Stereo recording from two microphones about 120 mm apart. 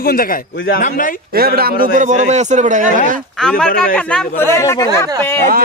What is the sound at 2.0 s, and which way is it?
A man's voice, 85° right.